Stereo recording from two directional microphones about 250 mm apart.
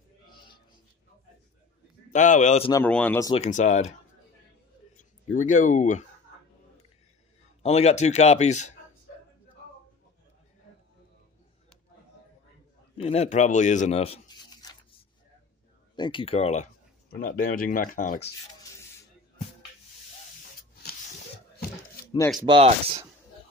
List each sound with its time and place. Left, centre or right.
2.0 s speech: left
2.7 s speech: centre
3.4 s speech: left
5.3 s speech: left
7.6 s speech: left
12.9 s speech: left
16.0 s speech: centre
22.0 s a sound: centre
22.5 s speech: right